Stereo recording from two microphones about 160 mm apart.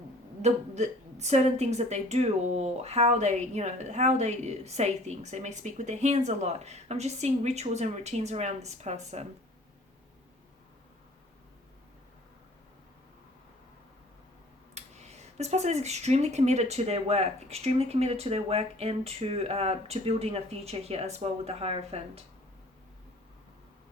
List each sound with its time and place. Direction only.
0.4 s a woman's voice: 45° right (ahead or behind)
14.8 s speech: 45° right (ahead or behind)